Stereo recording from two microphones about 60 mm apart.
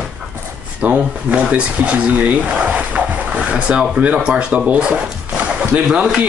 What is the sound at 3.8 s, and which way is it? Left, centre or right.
Speech, centre.